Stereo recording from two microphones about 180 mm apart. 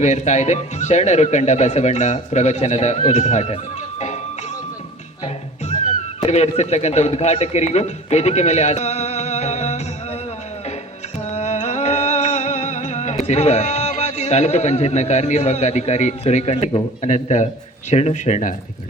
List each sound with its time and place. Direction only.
0.0 s speech: 40° left (ahead or behind)
6.2 s a man's voice: 35° left (ahead or behind)
11.3 s music: 40° left (ahead or behind)
17.9 s speech: 40° left (ahead or behind)